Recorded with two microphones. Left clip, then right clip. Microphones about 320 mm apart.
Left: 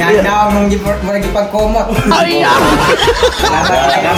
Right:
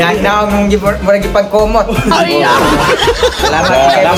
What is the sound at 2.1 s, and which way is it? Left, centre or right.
Speech, centre.